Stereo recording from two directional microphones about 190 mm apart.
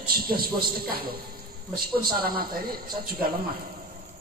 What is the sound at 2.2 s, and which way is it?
Speech, 50° right (ahead or behind).